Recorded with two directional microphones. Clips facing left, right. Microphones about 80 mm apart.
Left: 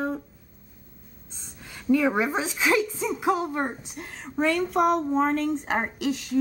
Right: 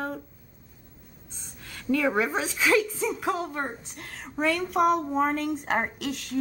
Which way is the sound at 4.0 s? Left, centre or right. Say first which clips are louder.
Left 2 dB; centre.